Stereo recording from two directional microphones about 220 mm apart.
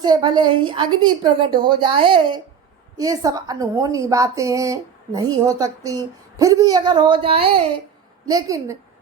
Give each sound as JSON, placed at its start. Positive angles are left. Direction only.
{"t": 0.0, "sound": "a woman's voice", "side_deg": -20}